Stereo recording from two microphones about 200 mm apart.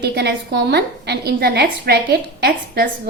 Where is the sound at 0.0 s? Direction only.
55° right (ahead or behind).